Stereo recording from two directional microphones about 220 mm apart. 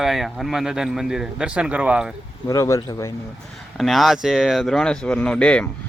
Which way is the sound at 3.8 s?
Centre (ahead or behind).